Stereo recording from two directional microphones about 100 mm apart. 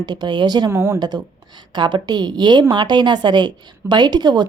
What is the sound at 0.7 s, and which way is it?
Speech, 25° right (ahead or behind).